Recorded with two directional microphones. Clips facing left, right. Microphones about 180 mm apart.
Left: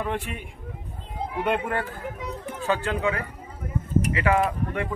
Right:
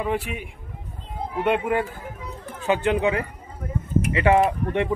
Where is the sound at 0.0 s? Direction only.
5° right (ahead or behind).